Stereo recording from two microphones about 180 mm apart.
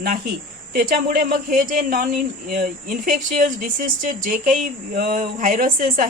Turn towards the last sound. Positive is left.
turn(degrees=-45)  # may be behind; listen again after turning